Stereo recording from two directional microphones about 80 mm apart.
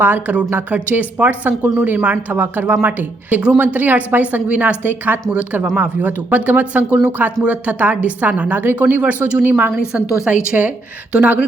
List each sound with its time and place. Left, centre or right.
0.0 s a woman's voice: right